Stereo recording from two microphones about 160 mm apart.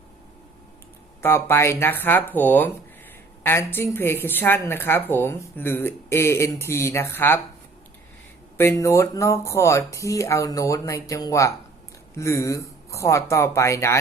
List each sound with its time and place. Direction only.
1.2 s speech: 15° left (ahead or behind)
8.8 s speech: 20° left (ahead or behind)